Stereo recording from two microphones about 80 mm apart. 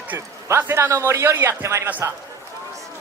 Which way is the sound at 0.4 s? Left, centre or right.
Right.